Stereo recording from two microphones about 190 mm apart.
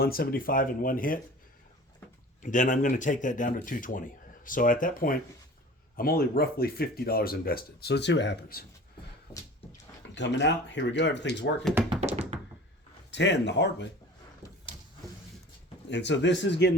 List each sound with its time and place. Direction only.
0.0 s speech: 50° left (ahead or behind)
2.4 s speech: 45° left (ahead or behind); by 8.6 s 60° left (ahead or behind)
9.3 s a sound: 15° left (ahead or behind)
10.2 s speech: 65° left (ahead or behind)
11.9 s thunk: 35° right (ahead or behind)
13.1 s speech: 65° left (ahead or behind)
15.9 s speech: 65° left (ahead or behind)